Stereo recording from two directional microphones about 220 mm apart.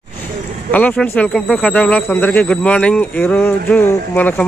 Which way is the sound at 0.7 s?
5° left (ahead or behind).